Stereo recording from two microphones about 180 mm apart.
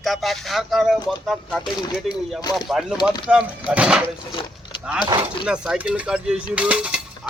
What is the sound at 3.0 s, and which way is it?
Speech, 25° left (ahead or behind).